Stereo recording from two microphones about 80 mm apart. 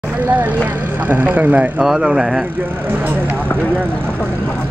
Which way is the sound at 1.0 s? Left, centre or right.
Right.